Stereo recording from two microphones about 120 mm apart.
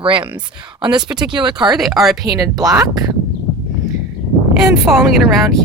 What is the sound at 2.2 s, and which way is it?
Speech, 25° right (ahead or behind).